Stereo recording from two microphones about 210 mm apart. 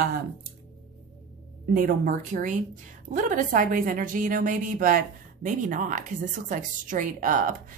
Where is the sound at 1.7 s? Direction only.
40° right (ahead or behind).